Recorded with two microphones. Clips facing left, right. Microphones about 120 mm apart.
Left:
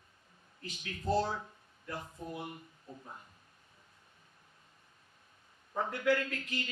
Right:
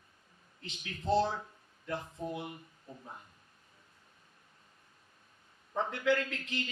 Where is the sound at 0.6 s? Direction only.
25° right (ahead or behind).